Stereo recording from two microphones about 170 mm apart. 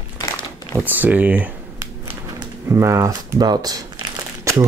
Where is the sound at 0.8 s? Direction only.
10° right (ahead or behind).